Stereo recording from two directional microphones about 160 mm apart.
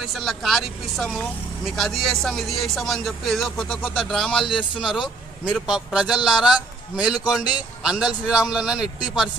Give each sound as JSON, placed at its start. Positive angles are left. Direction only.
{"t": 0.0, "sound": "speech", "side_deg": 0}
{"t": 4.5, "sound": "a man's voice", "side_deg": 30}
{"t": 4.8, "sound": "speech", "side_deg": 0}